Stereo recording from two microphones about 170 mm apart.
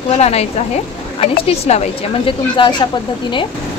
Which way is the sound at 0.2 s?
40° left (ahead or behind).